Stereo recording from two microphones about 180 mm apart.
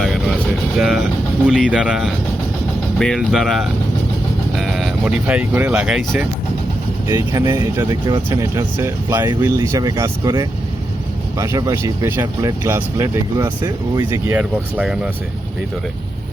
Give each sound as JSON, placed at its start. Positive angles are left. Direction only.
{"t": 0.0, "sound": "vehicle", "side_deg": 0}
{"t": 0.8, "sound": "speech", "side_deg": 0}
{"t": 7.1, "sound": "speech", "side_deg": -20}